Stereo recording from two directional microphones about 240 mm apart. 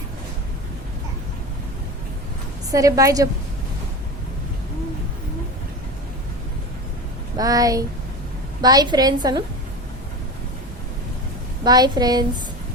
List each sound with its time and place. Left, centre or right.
2.7 s a woman's voice: centre
7.3 s a woman's voice: centre
11.6 s a woman's voice: centre